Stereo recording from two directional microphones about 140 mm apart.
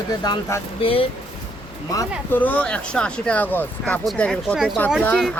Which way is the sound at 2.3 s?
10° left (ahead or behind).